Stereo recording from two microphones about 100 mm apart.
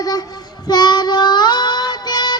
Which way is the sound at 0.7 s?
45° left (ahead or behind).